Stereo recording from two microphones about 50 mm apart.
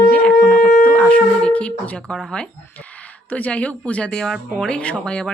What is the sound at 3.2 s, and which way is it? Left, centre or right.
Speech, left.